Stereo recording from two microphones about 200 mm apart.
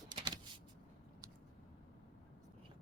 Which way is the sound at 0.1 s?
20° right (ahead or behind).